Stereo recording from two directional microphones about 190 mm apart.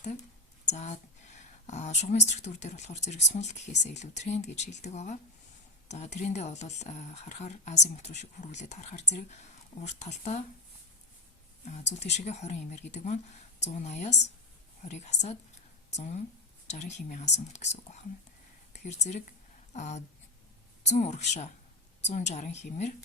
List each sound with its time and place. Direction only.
0.6 s a sound: 35° left (ahead or behind)
1.6 s speech: 40° left (ahead or behind)
11.7 s speech: 35° left (ahead or behind)
18.9 s speech: 35° left (ahead or behind)